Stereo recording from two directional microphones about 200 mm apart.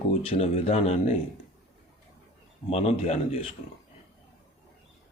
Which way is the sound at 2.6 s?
30° left (ahead or behind).